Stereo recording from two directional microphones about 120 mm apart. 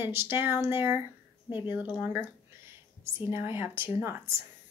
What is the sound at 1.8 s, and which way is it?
Speech, 40° left (ahead or behind).